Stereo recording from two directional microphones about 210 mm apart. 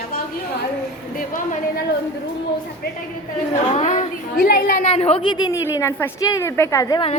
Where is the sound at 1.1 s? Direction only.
40° left (ahead or behind).